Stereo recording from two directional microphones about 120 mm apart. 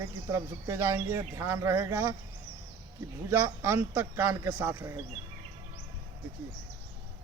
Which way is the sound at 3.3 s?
20° right (ahead or behind).